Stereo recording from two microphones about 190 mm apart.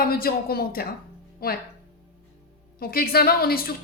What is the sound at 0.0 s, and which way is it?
Speech, 50° left (ahead or behind).